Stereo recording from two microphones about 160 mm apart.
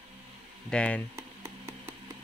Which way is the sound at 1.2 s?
20° right (ahead or behind).